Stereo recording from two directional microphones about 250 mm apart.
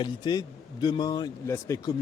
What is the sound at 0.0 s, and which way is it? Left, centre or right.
A man's voice, centre.